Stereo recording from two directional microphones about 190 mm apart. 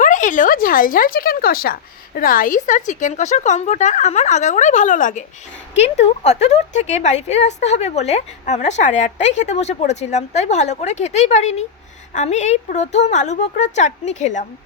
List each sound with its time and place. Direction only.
0.0 s speech: 40° left (ahead or behind)